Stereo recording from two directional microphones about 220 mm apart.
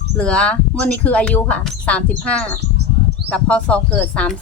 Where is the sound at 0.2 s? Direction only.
5° left (ahead or behind).